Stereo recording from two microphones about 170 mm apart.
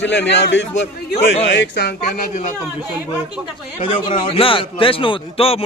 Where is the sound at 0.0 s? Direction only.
90° left.